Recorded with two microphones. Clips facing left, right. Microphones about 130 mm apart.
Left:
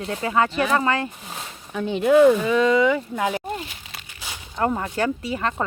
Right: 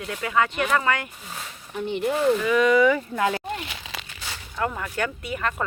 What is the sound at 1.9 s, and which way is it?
Speech, 90° left.